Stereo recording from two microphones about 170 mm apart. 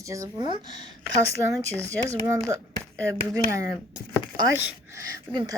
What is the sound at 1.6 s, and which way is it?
Speech, 15° right (ahead or behind).